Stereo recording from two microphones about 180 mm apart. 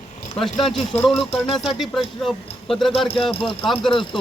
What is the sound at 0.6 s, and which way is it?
Speech, 30° left (ahead or behind).